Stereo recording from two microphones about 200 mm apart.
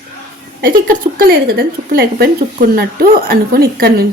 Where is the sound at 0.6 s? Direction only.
45° right (ahead or behind).